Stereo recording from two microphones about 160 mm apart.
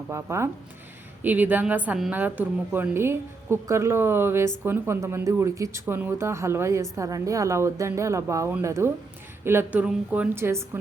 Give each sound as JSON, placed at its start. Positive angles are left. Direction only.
{"t": 0.1, "sound": "a woman's voice", "side_deg": -15}